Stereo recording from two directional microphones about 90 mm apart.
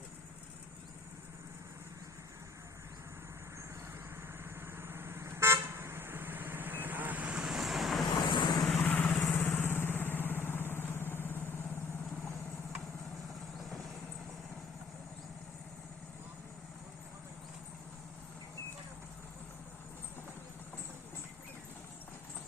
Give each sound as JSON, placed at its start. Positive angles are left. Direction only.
{"t": 4.6, "sound": "vehicle", "side_deg": -25}
{"t": 7.4, "sound": "vehicle", "side_deg": -5}
{"t": 8.2, "sound": "vehicle", "side_deg": 55}
{"t": 8.6, "sound": "vehicle", "side_deg": 20}